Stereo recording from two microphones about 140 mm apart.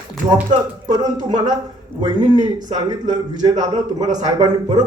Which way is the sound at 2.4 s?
30° right (ahead or behind).